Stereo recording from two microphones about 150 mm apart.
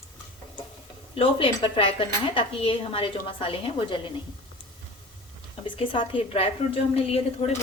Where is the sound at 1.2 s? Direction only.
35° left (ahead or behind).